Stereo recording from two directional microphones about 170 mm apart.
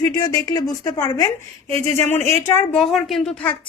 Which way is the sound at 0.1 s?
20° left (ahead or behind).